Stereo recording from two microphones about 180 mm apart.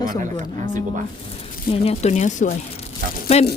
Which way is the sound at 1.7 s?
35° left (ahead or behind).